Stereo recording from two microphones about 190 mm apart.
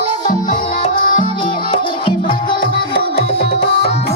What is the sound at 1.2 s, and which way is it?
Music, 25° left (ahead or behind).